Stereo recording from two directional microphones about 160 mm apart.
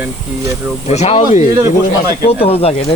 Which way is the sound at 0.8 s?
40° left (ahead or behind).